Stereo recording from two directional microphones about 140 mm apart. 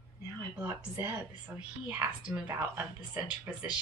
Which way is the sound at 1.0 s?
15° right (ahead or behind).